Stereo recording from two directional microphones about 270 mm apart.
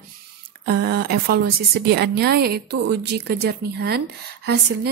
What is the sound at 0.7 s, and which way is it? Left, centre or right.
Speech, right.